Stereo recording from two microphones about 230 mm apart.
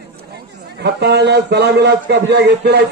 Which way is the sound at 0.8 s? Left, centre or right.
Right.